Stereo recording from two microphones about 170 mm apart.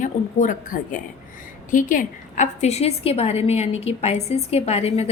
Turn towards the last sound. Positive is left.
turn(degrees=35)  # may be behind; listen again after turning